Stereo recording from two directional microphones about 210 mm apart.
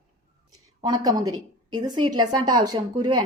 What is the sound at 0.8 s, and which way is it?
A woman's voice, 20° right (ahead or behind).